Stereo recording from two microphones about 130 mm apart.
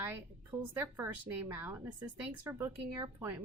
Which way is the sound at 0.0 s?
15° right (ahead or behind).